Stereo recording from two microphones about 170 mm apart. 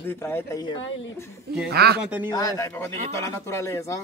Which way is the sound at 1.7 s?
70° right (ahead or behind).